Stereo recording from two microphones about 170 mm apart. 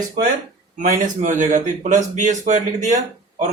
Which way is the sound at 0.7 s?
50° right (ahead or behind).